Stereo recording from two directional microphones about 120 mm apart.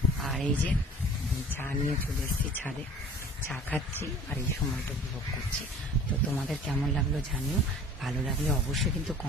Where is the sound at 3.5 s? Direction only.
15° left (ahead or behind).